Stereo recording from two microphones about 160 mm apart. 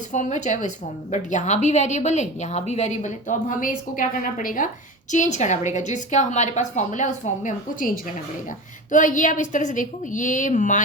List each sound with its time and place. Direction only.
0.1 s a woman's voice: 50° left (ahead or behind)